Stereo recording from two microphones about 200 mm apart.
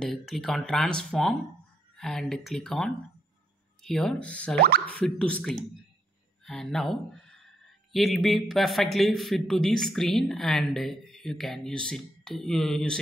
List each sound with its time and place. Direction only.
0.0 s a man's voice: centre (ahead or behind)
4.6 s speech: 50° right (ahead or behind)
5.0 s a man's voice: 5° left (ahead or behind)